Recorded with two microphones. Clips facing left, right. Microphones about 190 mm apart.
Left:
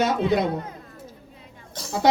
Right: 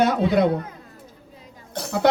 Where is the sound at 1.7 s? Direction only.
60° right (ahead or behind).